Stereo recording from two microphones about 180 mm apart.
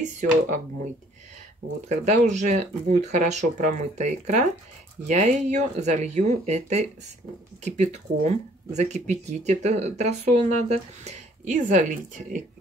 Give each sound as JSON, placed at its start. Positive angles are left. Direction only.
{"t": 1.9, "sound": "speech", "side_deg": -40}